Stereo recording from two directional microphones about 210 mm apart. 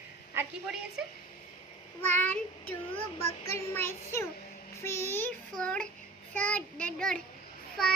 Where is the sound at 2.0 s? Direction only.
10° left (ahead or behind).